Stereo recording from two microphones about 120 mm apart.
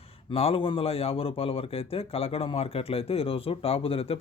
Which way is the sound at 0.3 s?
50° left (ahead or behind).